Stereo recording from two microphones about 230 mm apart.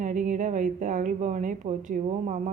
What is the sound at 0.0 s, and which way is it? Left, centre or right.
Speech, right.